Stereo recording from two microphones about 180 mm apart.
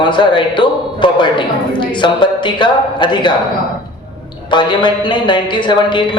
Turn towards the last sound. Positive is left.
turn(degrees=25)  # may be behind; listen again after turning